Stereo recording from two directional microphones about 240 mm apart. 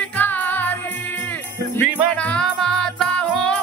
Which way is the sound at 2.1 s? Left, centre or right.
Centre.